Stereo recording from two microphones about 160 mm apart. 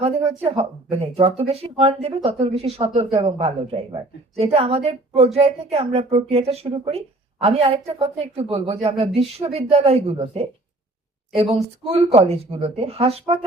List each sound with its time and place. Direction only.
0.0 s speech: 40° right (ahead or behind)